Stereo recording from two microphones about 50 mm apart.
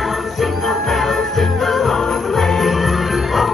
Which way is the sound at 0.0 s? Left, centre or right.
Centre.